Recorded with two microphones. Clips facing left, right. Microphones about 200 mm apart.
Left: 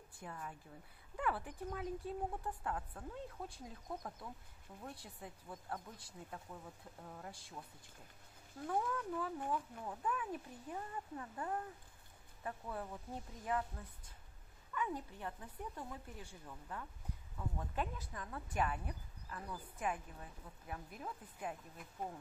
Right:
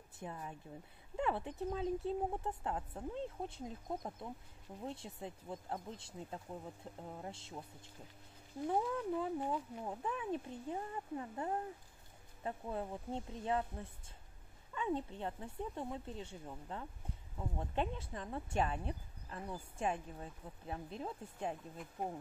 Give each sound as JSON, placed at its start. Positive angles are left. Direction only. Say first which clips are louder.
{"t": 0.2, "sound": "speech", "louder": "right 3 dB", "side_deg": -20}